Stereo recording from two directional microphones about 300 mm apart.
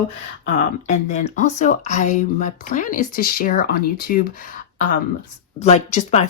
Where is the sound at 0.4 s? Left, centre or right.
Left.